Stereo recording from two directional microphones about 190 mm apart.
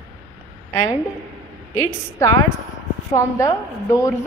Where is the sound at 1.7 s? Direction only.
15° left (ahead or behind).